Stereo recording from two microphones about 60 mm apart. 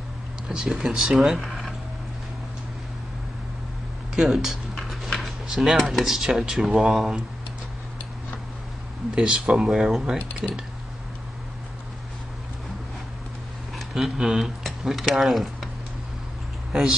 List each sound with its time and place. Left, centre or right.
0.5 s speech: centre
4.1 s speech: centre
9.1 s speech: centre
13.7 s speech: centre